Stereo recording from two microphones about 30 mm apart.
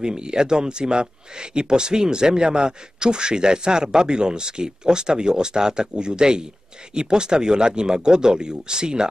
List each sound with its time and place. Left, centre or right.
0.0 s speech: right